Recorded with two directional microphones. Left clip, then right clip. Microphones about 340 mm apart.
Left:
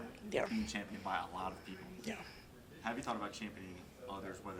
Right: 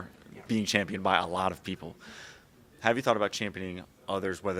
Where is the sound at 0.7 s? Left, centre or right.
Right.